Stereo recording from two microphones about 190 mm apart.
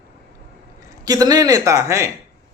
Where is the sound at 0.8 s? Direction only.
20° right (ahead or behind).